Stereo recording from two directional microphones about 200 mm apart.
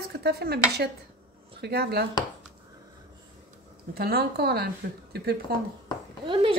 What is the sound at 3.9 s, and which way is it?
Speech, 50° right (ahead or behind).